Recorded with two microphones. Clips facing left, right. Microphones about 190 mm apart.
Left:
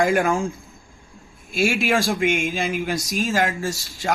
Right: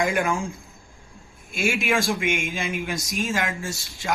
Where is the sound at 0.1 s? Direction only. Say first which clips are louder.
Left 4 dB; 40° left (ahead or behind).